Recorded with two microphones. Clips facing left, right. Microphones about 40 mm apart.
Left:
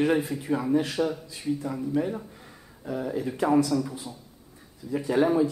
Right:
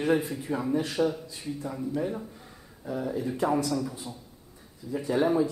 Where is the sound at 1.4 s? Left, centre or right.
Centre.